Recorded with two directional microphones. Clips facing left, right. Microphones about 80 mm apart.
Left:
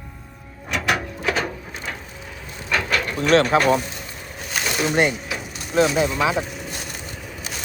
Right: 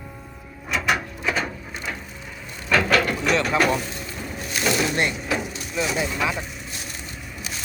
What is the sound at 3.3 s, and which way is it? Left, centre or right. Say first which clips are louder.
Speech: left 9 dB; left.